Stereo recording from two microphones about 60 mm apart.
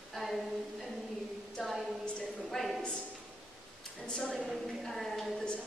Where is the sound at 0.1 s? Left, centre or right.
Centre.